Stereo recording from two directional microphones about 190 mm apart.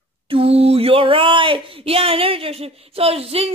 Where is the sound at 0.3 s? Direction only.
30° right (ahead or behind).